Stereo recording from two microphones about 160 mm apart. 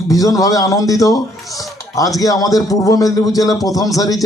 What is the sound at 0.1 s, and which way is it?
Speech, 20° left (ahead or behind).